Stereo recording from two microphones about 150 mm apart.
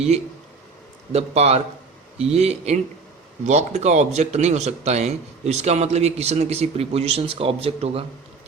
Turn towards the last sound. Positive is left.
turn(degrees=-40)  # may be behind; listen again after turning